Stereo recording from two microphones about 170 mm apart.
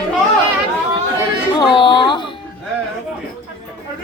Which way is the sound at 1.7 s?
25° left (ahead or behind).